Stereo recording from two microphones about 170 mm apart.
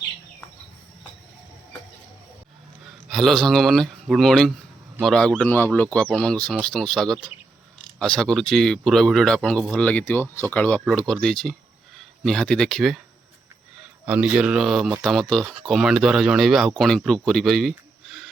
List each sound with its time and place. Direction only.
3.1 s speech: centre (ahead or behind)
14.0 s speech: 5° right (ahead or behind)